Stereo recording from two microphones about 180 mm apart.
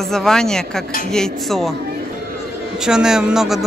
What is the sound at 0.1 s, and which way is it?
A man's voice, 5° left (ahead or behind).